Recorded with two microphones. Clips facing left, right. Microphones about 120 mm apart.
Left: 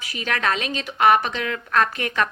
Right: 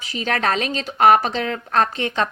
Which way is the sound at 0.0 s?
30° right (ahead or behind).